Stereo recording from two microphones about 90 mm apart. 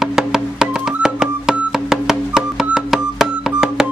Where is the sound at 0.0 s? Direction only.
5° right (ahead or behind).